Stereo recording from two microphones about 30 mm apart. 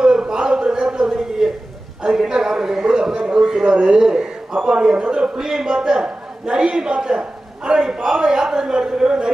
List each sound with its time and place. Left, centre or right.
0.0 s a sound: right
2.0 s a man's voice: right
3.7 s speech: right
4.0 s a man's voice: right